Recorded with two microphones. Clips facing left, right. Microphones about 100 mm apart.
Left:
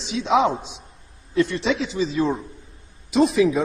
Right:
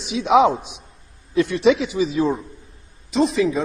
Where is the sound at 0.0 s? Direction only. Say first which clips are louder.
Right 4 dB; 15° right (ahead or behind).